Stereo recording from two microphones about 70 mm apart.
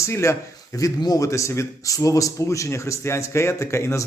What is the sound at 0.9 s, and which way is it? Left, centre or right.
Speech, left.